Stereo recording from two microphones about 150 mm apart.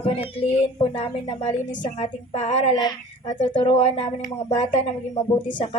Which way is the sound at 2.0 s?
45° left (ahead or behind).